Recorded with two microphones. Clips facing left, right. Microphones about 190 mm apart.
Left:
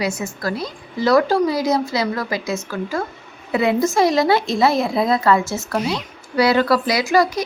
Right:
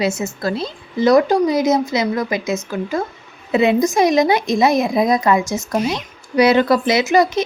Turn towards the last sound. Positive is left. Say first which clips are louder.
# right 2 dB
turn(degrees=-20)  # may be behind; listen again after turning